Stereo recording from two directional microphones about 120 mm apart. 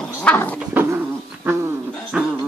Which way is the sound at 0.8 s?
15° right (ahead or behind).